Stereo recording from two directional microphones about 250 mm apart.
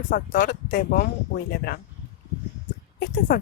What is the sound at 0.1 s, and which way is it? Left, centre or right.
Speech, left.